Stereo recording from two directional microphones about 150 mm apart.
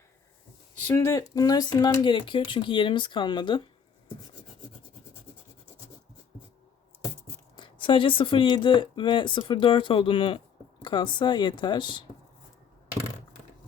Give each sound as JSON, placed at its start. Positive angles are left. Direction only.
{"t": 0.9, "sound": "speech", "side_deg": 20}
{"t": 7.5, "sound": "speech", "side_deg": 30}